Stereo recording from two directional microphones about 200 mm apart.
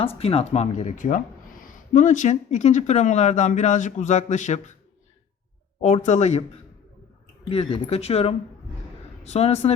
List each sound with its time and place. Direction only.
0.0 s speech: 30° left (ahead or behind)
5.8 s speech: 35° left (ahead or behind)
7.5 s speech: 30° left (ahead or behind)